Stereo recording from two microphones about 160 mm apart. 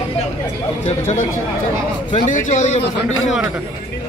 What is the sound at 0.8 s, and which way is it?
A man's voice, 45° left (ahead or behind).